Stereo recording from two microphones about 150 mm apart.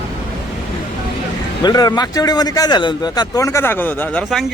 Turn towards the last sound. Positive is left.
turn(degrees=10)  # may be behind; listen again after turning